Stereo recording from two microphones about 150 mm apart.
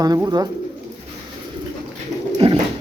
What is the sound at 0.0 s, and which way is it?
Speech, 25° right (ahead or behind).